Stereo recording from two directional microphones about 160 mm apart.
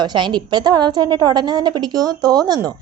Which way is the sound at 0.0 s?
30° right (ahead or behind).